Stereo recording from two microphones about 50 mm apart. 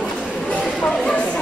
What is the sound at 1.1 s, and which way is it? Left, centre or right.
Chatter, left.